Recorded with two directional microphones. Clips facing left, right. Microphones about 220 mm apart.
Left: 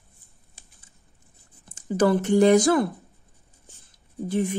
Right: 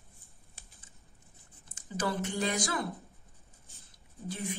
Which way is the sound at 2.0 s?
50° left (ahead or behind).